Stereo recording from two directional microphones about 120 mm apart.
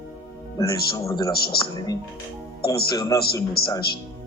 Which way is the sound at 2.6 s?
25° left (ahead or behind).